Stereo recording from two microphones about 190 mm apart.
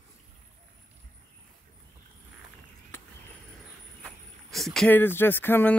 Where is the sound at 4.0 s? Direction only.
Centre (ahead or behind).